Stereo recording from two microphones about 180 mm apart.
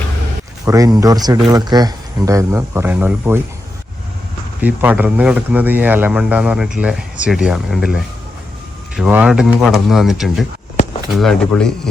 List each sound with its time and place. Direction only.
0.6 s speech: 20° right (ahead or behind)
4.6 s speech: 10° right (ahead or behind)